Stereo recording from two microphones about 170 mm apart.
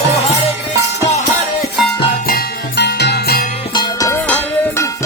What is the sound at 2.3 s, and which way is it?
Music, 70° left (ahead or behind).